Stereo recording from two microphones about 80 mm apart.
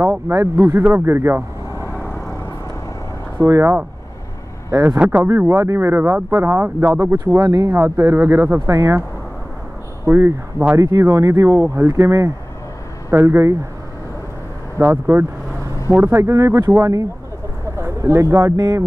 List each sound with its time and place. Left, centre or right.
0.0 s speech: right
2.0 s vehicle: left
3.3 s speech: right
4.9 s speech: centre
5.5 s speech: right
7.4 s speech: right
7.7 s speech: right
10.0 s speech: right
10.8 s speech: right
13.1 s speech: right
14.8 s speech: right